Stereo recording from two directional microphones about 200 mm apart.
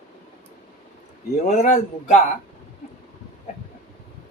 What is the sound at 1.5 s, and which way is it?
Speech, 35° left (ahead or behind).